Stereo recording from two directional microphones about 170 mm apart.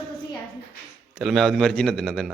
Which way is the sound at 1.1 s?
Centre (ahead or behind).